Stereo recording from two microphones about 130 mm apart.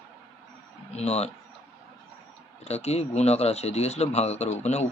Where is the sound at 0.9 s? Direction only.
55° left (ahead or behind).